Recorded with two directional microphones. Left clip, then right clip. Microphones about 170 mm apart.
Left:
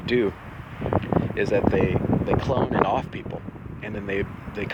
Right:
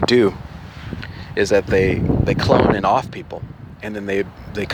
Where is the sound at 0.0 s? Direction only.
35° right (ahead or behind).